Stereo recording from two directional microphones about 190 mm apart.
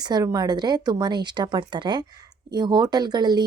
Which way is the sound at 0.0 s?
20° right (ahead or behind).